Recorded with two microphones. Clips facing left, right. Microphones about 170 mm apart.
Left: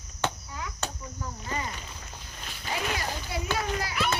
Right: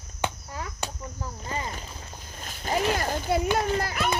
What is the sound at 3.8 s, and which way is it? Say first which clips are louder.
Children playing: right 3 dB; 50° right (ahead or behind).